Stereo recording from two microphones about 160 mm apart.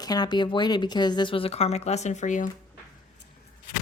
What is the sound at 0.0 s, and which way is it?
Speech, 25° left (ahead or behind).